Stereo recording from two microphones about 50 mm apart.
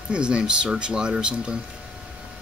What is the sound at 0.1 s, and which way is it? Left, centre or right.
Speech, centre.